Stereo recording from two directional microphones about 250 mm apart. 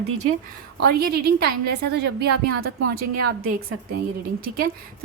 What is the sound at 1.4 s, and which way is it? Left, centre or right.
Speech, right.